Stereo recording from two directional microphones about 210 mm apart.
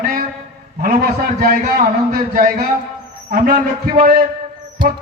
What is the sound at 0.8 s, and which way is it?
A man's voice, 45° right (ahead or behind).